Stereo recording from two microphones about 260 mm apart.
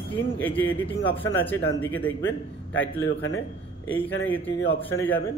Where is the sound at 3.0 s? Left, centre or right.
Left.